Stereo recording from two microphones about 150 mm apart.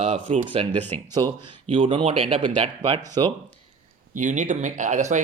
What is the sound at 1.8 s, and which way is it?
Speech, 35° right (ahead or behind).